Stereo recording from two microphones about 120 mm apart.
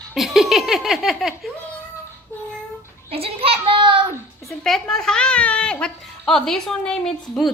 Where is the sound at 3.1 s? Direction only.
55° right (ahead or behind).